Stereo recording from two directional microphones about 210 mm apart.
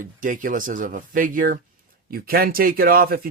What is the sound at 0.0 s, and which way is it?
Speech, 40° right (ahead or behind).